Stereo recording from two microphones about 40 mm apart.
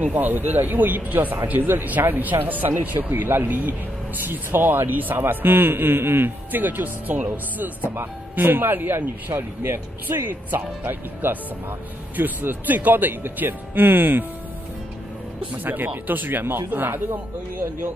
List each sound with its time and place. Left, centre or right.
0.0 s a man's voice: right
4.2 s a man's voice: right
6.6 s speech: right
7.9 s a man's voice: right
15.5 s speech: right